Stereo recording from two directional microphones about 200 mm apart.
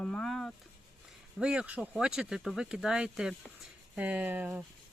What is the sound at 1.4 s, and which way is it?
Speech, 5° right (ahead or behind).